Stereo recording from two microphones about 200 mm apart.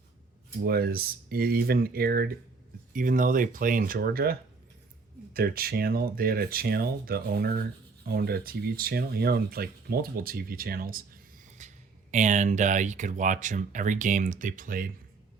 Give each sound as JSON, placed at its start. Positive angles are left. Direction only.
{"t": 0.6, "sound": "speech", "side_deg": -50}